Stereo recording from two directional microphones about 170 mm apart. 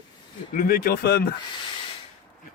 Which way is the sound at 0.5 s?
60° left (ahead or behind).